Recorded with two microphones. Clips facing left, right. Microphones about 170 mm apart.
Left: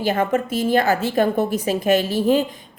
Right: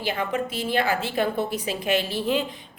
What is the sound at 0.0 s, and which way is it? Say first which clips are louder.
A woman's voice: left 6 dB; 45° left (ahead or behind).